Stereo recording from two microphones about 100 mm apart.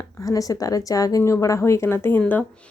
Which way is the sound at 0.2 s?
35° left (ahead or behind).